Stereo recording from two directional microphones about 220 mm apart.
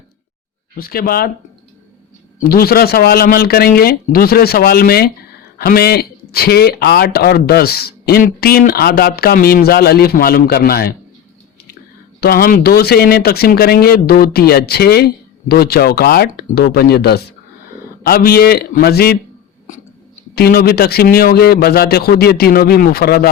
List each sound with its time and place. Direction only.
0.8 s a man's voice: 40° left (ahead or behind)
2.4 s a man's voice: 45° left (ahead or behind)
12.2 s a man's voice: 40° left (ahead or behind)
20.3 s a man's voice: 45° left (ahead or behind)